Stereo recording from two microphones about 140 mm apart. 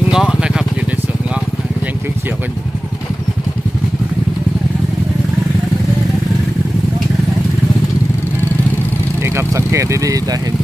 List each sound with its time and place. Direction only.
0.1 s vehicle: 5° right (ahead or behind)
9.2 s vehicle: 20° right (ahead or behind)